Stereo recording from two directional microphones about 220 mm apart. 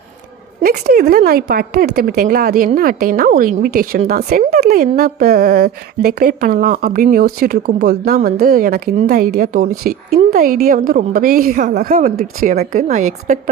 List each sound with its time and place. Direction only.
0.6 s a woman's voice: 45° right (ahead or behind)